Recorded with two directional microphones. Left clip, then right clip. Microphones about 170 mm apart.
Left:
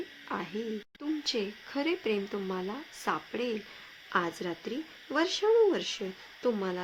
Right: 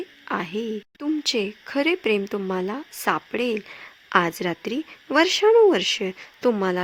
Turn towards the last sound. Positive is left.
turn(degrees=-50)  # may be behind; listen again after turning